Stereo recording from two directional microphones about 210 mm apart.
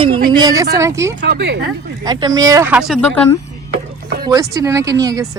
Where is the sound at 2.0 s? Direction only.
20° right (ahead or behind); by 3.4 s 5° left (ahead or behind).